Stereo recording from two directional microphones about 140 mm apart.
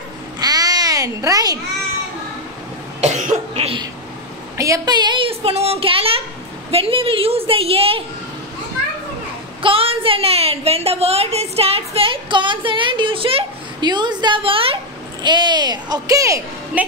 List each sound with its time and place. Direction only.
0.4 s cat: 30° right (ahead or behind)
3.0 s cough: 55° right (ahead or behind)
4.6 s a woman's voice: 25° right (ahead or behind); by 8.0 s 45° right (ahead or behind)
9.6 s a woman's voice: 40° right (ahead or behind); by 16.4 s 20° right (ahead or behind)
16.7 s a woman's voice: 10° right (ahead or behind)